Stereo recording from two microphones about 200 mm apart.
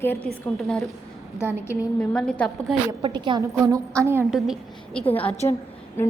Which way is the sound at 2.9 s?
25° right (ahead or behind).